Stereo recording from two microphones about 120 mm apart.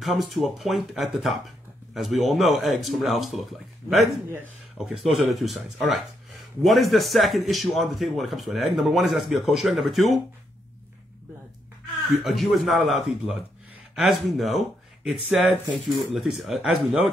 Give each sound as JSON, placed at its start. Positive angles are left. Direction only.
{"t": 0.0, "sound": "speech", "side_deg": 0}
{"t": 12.2, "sound": "speech", "side_deg": 0}